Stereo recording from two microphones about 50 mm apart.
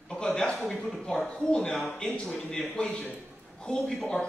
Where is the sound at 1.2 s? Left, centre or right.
Centre.